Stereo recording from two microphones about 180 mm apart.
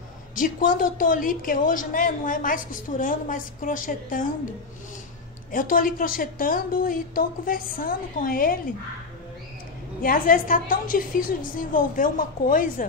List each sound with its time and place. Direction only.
0.4 s a woman's voice: 50° left (ahead or behind)
5.5 s a woman's voice: 50° left (ahead or behind)
10.0 s a woman's voice: 50° left (ahead or behind)